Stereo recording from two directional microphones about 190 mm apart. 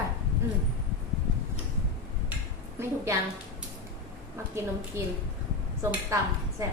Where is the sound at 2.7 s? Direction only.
15° right (ahead or behind).